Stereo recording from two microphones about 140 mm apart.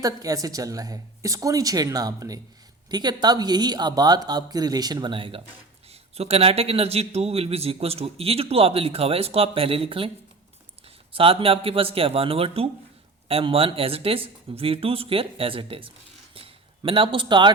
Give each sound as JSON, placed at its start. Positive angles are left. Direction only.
{"t": 0.0, "sound": "a woman's voice", "side_deg": -25}